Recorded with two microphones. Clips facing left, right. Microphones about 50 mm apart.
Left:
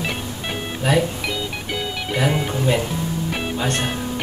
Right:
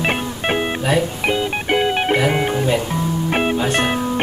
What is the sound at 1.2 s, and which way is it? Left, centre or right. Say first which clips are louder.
Music: right 7 dB; right.